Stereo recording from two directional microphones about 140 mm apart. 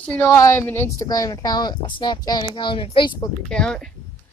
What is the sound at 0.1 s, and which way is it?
Speech, 15° left (ahead or behind).